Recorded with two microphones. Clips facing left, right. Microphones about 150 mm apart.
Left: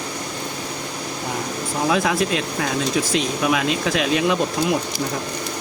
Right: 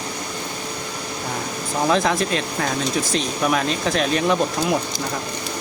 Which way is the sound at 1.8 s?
5° left (ahead or behind).